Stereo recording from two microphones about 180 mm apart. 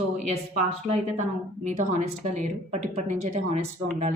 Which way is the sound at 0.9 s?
40° right (ahead or behind).